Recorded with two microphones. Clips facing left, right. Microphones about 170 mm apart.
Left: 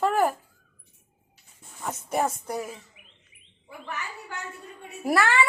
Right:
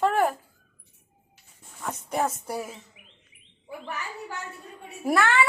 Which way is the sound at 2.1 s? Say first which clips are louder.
Left 1 dB; 5° left (ahead or behind).